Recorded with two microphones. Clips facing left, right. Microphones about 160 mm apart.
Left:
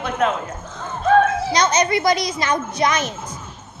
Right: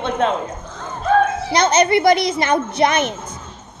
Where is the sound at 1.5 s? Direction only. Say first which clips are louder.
Right 5 dB; 60° right (ahead or behind).